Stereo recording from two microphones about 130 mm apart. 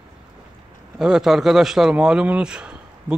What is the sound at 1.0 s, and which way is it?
A man's voice, 5° right (ahead or behind).